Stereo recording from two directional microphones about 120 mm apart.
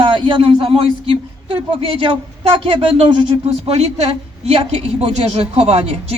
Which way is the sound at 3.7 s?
60° right (ahead or behind).